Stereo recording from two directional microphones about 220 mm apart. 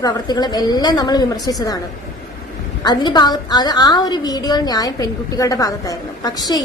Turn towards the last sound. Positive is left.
turn(degrees=15)  # may be behind; listen again after turning